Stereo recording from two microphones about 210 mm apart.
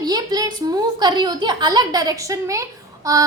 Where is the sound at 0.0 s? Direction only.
20° right (ahead or behind).